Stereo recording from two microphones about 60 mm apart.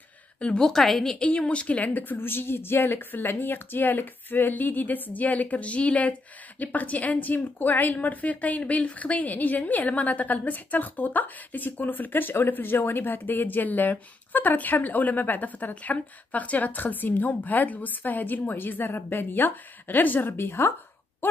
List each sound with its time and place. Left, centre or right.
0.4 s a woman's voice: centre
0.7 s a woman's voice: centre
1.2 s speech: centre; by 21.4 s left